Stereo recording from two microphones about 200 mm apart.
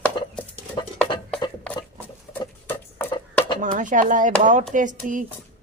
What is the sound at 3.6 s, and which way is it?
A woman's voice, 40° right (ahead or behind).